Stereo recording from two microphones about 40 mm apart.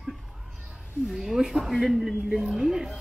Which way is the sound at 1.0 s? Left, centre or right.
Centre.